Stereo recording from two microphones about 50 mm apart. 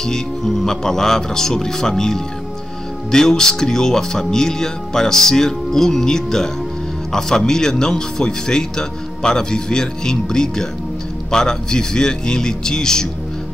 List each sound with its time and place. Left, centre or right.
0.0 s speech: centre